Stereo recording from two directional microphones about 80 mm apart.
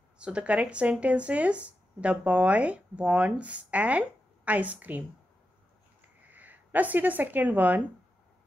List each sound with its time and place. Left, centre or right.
0.2 s a woman's voice: centre
6.3 s speech: right